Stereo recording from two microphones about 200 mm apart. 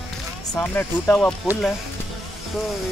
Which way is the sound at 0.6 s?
10° left (ahead or behind).